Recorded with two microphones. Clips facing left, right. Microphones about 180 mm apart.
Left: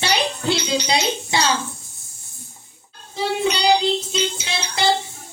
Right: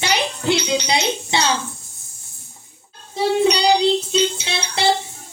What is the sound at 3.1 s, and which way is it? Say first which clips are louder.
Music: right 5 dB; 35° right (ahead or behind).